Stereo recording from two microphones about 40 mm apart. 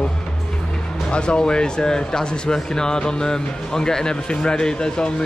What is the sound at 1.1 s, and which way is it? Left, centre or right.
Speech, left.